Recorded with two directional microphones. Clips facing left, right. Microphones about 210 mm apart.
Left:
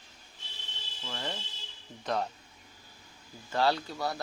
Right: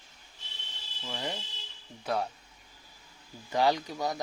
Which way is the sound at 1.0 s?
15° right (ahead or behind).